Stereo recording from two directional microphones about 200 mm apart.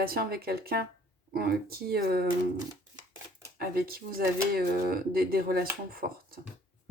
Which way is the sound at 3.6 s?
50° right (ahead or behind).